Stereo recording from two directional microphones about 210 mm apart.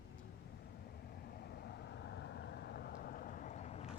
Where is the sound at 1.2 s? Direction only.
50° left (ahead or behind); by 3.9 s 30° left (ahead or behind).